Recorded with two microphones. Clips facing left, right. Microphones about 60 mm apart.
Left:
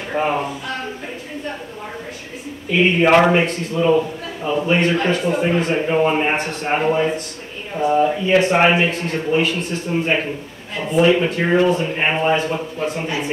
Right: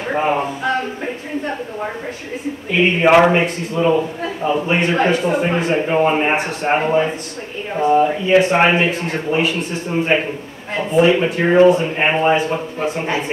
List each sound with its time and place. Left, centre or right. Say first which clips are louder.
0.1 s speech: right 2 dB; centre
3.0 s a man's voice: right 2 dB; centre
13.0 s speech: right 3 dB; right